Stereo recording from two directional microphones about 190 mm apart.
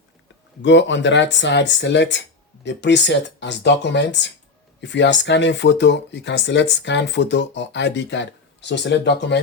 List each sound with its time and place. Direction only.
0.6 s speech: 70° left (ahead or behind)